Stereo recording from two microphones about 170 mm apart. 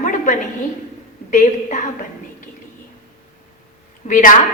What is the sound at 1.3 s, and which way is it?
Speech, 45° left (ahead or behind).